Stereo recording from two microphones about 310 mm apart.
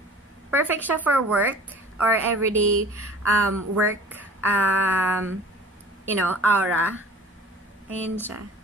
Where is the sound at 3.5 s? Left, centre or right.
Right.